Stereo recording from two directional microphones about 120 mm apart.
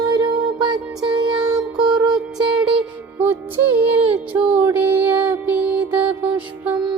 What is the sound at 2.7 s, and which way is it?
Music, 15° right (ahead or behind).